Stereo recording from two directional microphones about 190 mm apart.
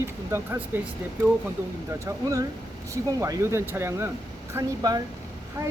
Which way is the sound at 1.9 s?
15° right (ahead or behind).